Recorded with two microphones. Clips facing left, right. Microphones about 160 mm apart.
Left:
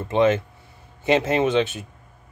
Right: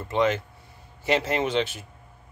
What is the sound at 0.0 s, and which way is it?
Speech, 20° left (ahead or behind).